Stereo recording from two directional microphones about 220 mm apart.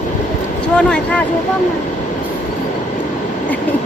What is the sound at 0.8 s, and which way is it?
Speech, 5° left (ahead or behind).